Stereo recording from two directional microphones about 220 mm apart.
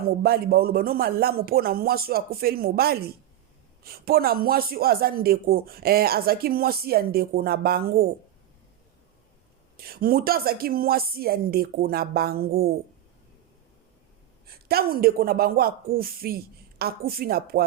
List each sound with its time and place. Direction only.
0.2 s speech: 45° right (ahead or behind)
9.7 s speech: 45° right (ahead or behind)
14.4 s speech: 45° right (ahead or behind)